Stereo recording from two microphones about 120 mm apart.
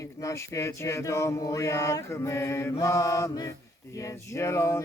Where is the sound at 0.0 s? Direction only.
25° left (ahead or behind).